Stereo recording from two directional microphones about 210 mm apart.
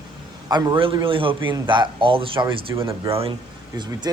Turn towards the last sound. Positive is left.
turn(degrees=-20)  # may be behind; listen again after turning